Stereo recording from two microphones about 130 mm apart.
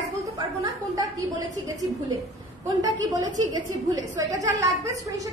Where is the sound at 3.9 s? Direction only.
25° right (ahead or behind).